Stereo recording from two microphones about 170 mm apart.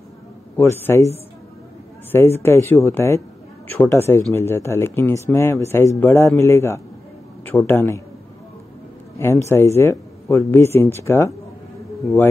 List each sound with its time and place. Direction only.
0.6 s speech: 15° left (ahead or behind)
2.1 s speech: 15° left (ahead or behind)
9.5 s speech: 15° left (ahead or behind)